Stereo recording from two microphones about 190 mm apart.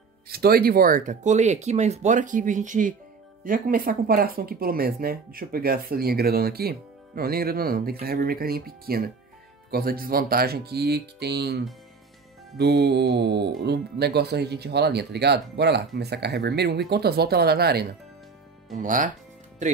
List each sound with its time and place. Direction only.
0.3 s speech: 55° right (ahead or behind)
18.8 s speech: 45° right (ahead or behind)